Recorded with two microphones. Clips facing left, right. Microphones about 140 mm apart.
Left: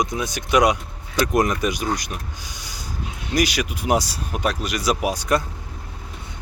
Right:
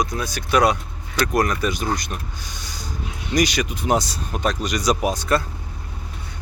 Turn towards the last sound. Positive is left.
turn(degrees=15)  # may be behind; listen again after turning